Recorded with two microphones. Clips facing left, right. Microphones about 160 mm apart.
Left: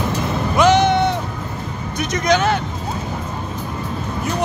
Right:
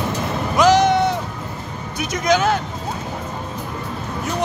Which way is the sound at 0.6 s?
Centre (ahead or behind).